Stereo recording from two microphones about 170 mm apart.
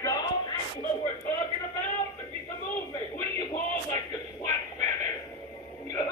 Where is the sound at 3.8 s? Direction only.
20° left (ahead or behind).